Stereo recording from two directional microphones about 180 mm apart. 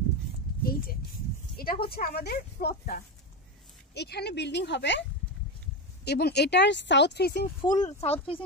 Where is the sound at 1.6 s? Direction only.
60° left (ahead or behind).